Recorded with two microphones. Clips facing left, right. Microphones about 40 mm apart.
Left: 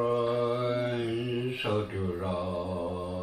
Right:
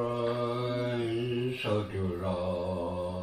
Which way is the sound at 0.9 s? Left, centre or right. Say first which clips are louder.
Even; centre.